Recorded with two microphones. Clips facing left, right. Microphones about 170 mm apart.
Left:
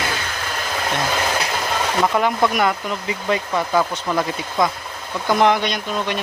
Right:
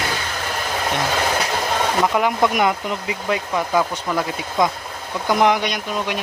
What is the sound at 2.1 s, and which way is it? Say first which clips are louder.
Speech: even; 10° right (ahead or behind).